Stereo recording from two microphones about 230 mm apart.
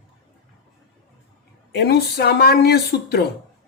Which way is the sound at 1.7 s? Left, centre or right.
Left.